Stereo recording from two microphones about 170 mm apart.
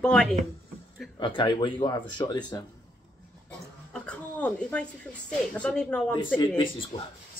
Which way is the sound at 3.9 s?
5° left (ahead or behind).